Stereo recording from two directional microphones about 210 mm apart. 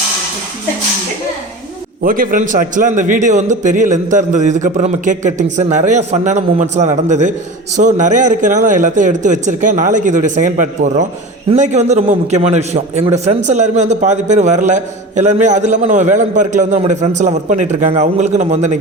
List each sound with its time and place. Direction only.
2.0 s a man's voice: 40° right (ahead or behind)